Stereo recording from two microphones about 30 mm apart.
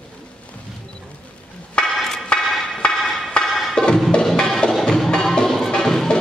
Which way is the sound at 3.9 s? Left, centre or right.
Left.